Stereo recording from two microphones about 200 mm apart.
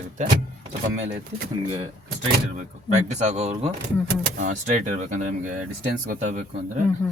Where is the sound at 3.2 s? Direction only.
35° right (ahead or behind).